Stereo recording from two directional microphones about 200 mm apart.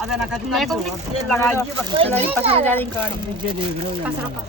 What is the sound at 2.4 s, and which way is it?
Speech, 30° right (ahead or behind).